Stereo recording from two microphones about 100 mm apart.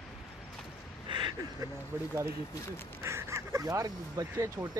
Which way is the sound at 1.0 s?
50° right (ahead or behind).